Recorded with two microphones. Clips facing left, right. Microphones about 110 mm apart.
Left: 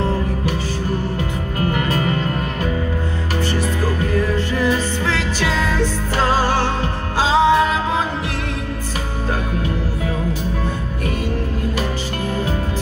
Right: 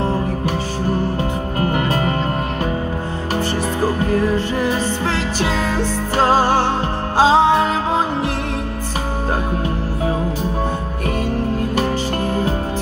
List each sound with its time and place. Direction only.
1.6 s music: 35° right (ahead or behind)
3.8 s music: 35° right (ahead or behind)